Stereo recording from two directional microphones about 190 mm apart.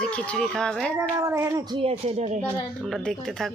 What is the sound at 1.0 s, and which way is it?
Speech, 15° right (ahead or behind).